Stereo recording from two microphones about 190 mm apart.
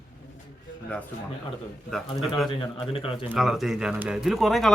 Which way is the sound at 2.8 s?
30° left (ahead or behind).